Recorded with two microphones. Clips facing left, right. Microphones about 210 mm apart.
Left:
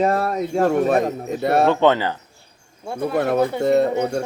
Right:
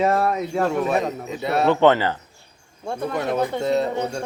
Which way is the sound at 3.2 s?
55° left (ahead or behind).